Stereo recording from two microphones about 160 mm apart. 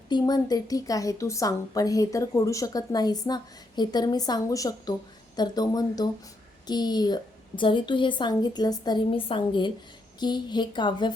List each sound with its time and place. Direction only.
0.1 s a woman's voice: 25° left (ahead or behind)